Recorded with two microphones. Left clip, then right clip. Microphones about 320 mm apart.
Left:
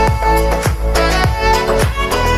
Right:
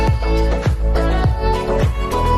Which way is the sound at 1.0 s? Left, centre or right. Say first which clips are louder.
Left 7 dB; left.